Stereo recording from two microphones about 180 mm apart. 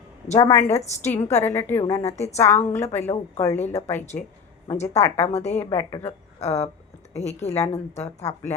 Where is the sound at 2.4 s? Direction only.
10° left (ahead or behind).